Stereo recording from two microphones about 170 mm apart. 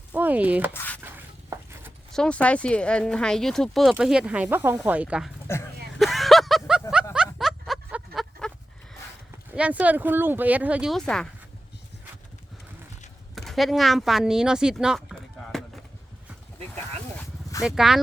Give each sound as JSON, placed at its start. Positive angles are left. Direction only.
{"t": 0.1, "sound": "speech", "side_deg": -10}
{"t": 0.7, "sound": "squish", "side_deg": 10}
{"t": 1.0, "sound": "a sound", "side_deg": -10}
{"t": 2.1, "sound": "speech", "side_deg": 5}
{"t": 5.5, "sound": "speech", "side_deg": 15}
{"t": 6.0, "sound": "a sound", "side_deg": 0}
{"t": 9.6, "sound": "speech", "side_deg": -10}
{"t": 13.3, "sound": "speech", "side_deg": 0}
{"t": 17.6, "sound": "speech", "side_deg": -5}